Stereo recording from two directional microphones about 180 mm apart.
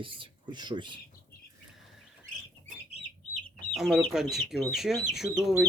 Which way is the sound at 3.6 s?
Centre (ahead or behind).